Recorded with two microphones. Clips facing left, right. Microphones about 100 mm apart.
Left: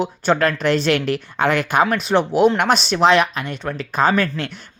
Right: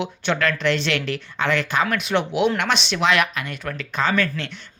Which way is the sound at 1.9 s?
35° left (ahead or behind).